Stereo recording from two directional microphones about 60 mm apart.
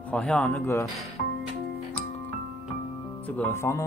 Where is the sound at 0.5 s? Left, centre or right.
Left.